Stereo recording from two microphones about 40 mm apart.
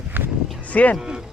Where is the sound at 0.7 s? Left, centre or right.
Left.